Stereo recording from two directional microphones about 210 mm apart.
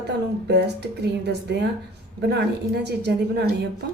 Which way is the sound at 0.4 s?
55° right (ahead or behind).